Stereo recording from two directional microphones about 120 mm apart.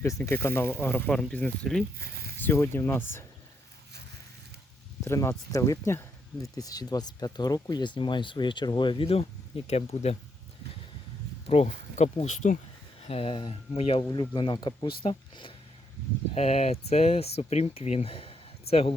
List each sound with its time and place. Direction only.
0.0 s speech: 20° left (ahead or behind); by 1.8 s 5° left (ahead or behind)
2.4 s speech: 20° left (ahead or behind)
5.0 s speech: 25° left (ahead or behind); by 9.2 s 50° left (ahead or behind)
9.6 s speech: 60° left (ahead or behind)
11.4 s speech: 65° left (ahead or behind)
12.2 s speech: 90° left
13.0 s speech: 55° left (ahead or behind)
14.1 s speech: 40° left (ahead or behind)
16.3 s speech: 60° left (ahead or behind)